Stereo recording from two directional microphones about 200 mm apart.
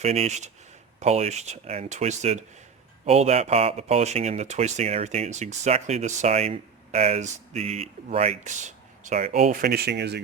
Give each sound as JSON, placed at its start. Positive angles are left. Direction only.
{"t": 0.0, "sound": "speech", "side_deg": -30}